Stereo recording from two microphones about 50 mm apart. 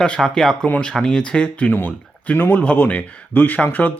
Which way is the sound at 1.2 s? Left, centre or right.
Left.